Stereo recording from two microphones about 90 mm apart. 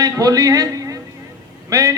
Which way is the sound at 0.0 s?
40° right (ahead or behind).